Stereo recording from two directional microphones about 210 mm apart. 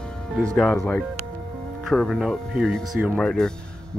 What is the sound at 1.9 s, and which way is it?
Speech, centre (ahead or behind).